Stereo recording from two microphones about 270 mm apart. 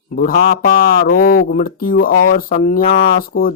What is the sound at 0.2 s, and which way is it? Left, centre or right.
Speech, left.